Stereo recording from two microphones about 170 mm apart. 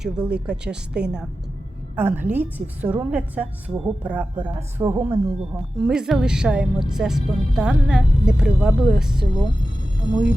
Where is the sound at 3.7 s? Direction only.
35° right (ahead or behind).